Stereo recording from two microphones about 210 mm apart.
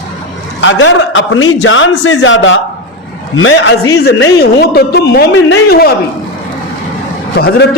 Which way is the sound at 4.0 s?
50° left (ahead or behind).